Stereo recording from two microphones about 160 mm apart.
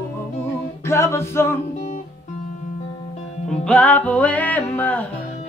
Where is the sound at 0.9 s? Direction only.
15° left (ahead or behind).